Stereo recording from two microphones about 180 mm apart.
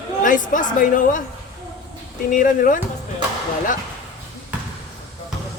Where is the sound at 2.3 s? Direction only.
45° left (ahead or behind).